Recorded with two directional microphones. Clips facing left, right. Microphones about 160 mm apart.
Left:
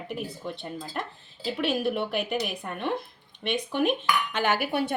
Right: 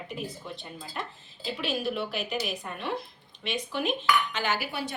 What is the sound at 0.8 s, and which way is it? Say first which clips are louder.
Speech: left 1 dB; 40° left (ahead or behind).